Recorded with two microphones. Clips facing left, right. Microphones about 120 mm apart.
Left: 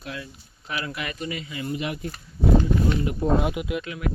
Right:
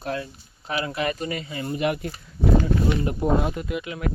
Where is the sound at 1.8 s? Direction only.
60° right (ahead or behind).